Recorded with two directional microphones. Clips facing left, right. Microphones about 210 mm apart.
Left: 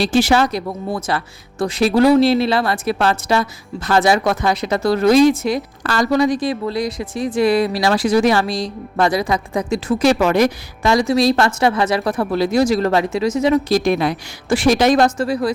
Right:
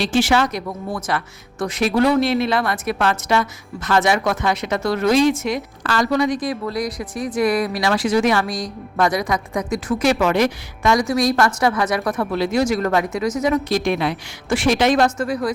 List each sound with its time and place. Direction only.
0.0 s speech: 35° left (ahead or behind)